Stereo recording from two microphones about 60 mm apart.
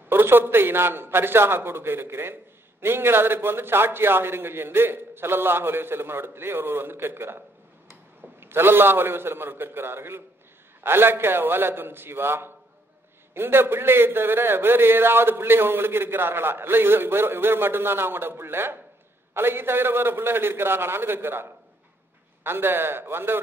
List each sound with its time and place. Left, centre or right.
0.1 s a man's voice: right